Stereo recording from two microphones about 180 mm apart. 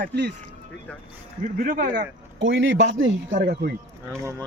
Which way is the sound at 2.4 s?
90° right.